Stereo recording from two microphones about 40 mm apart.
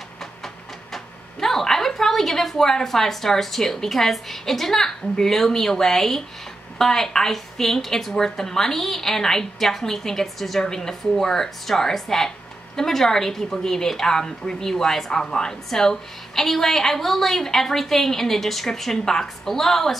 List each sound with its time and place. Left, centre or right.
0.9 s a woman's voice: centre